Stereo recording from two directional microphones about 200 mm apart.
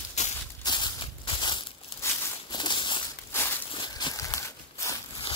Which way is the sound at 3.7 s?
20° left (ahead or behind).